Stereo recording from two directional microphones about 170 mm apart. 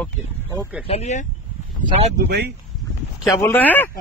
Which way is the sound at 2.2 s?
75° right (ahead or behind).